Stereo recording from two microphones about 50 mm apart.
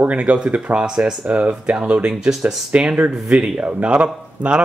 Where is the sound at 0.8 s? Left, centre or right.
Centre.